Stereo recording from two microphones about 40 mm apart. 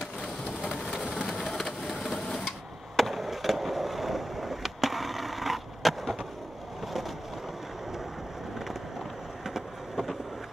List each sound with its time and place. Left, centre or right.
0.6 s a sound: left
1.4 s vehicle: centre
3.0 s skateboard: centre